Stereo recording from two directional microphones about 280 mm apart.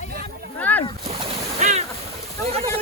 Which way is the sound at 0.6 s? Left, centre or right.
Centre.